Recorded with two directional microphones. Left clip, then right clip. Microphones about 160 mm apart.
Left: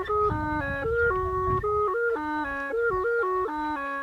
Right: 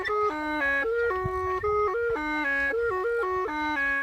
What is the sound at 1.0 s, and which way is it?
Music, 45° right (ahead or behind).